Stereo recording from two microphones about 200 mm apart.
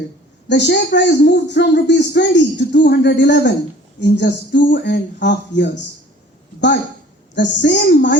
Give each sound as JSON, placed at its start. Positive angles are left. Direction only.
{"t": 0.4, "sound": "speech", "side_deg": 60}
{"t": 7.3, "sound": "speech", "side_deg": 60}